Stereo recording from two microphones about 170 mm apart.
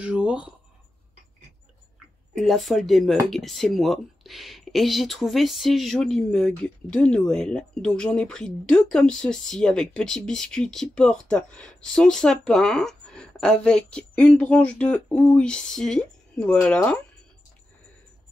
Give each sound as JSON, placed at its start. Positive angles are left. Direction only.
{"t": 0.0, "sound": "speech", "side_deg": -5}
{"t": 2.3, "sound": "speech", "side_deg": 0}